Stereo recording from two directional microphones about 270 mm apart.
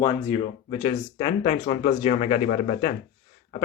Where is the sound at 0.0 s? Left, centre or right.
Centre.